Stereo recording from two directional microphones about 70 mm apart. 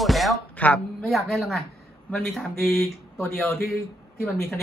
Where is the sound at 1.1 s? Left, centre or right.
Centre.